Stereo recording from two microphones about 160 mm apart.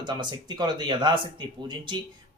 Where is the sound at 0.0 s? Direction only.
25° right (ahead or behind).